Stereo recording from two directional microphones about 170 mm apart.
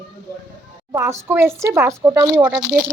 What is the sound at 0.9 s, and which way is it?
A woman's voice, 15° right (ahead or behind).